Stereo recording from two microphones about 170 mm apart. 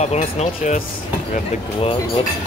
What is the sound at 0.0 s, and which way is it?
Speech, 40° left (ahead or behind).